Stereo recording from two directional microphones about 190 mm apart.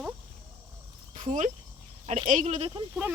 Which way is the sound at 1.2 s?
40° right (ahead or behind).